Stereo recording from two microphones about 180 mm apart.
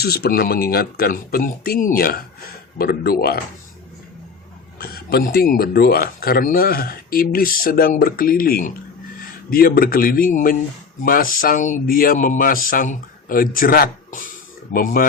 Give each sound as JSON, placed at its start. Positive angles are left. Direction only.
{"t": 0.0, "sound": "speech", "side_deg": 60}
{"t": 4.8, "sound": "speech", "side_deg": 60}